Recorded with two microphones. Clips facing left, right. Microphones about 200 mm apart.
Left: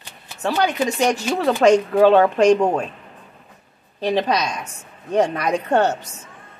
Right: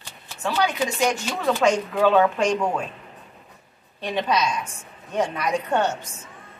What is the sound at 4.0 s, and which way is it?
Speech, 35° left (ahead or behind).